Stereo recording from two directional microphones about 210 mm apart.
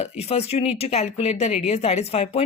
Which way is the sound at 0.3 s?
30° left (ahead or behind).